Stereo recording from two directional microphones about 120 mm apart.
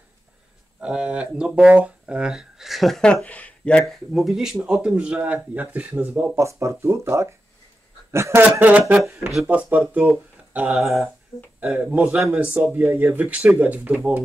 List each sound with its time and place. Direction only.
0.7 s speech: 10° right (ahead or behind); by 3.8 s 10° left (ahead or behind)
4.1 s speech: 5° right (ahead or behind)
6.3 s speech: 25° right (ahead or behind)